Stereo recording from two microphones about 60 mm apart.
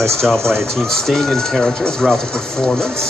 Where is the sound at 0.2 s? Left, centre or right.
Centre.